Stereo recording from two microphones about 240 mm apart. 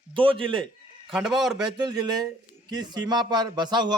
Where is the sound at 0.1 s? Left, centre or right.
Right.